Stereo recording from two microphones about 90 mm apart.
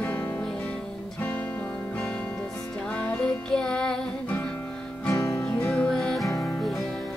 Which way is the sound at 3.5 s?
10° left (ahead or behind).